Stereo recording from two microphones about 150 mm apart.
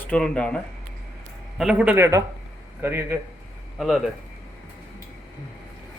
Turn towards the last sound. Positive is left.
turn(degrees=0)  # may be behind; listen again after turning